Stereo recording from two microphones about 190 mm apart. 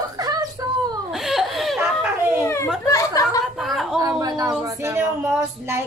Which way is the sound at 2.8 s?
15° left (ahead or behind).